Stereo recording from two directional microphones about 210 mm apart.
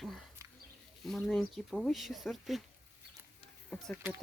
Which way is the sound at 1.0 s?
Centre (ahead or behind).